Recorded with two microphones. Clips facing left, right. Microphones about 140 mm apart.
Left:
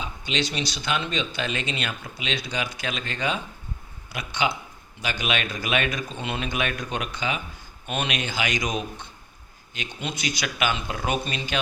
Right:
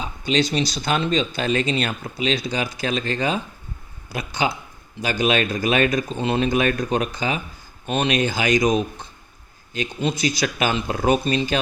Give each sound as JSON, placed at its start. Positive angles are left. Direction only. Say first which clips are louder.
{"t": 0.0, "sound": "speech", "louder": "right 7 dB", "side_deg": -40}